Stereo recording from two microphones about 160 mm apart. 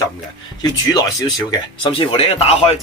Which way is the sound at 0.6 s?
25° left (ahead or behind).